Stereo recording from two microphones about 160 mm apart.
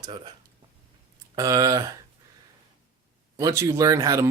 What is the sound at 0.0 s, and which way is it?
Speech, 30° right (ahead or behind).